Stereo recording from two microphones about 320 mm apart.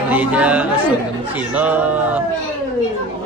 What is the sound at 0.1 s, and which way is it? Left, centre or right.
Speech, centre.